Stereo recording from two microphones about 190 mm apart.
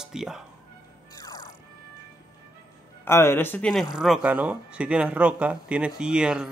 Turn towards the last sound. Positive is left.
turn(degrees=-5)  # may be behind; listen again after turning